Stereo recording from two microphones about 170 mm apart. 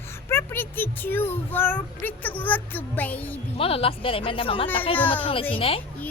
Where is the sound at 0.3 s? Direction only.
15° left (ahead or behind).